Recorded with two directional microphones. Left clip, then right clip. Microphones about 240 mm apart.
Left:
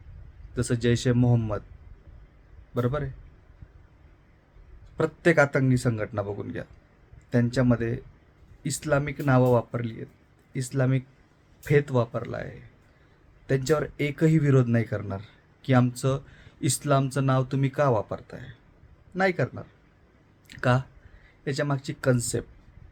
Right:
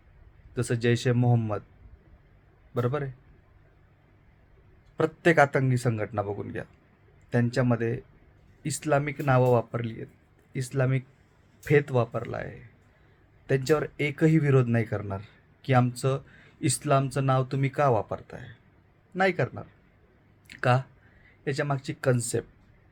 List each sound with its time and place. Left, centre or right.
0.5 s speech: centre
2.7 s speech: centre
4.9 s speech: centre